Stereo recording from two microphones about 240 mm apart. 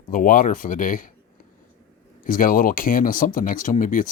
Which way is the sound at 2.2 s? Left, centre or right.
Left.